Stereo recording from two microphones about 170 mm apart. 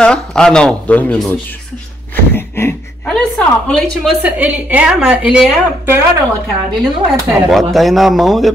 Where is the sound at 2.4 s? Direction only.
15° left (ahead or behind).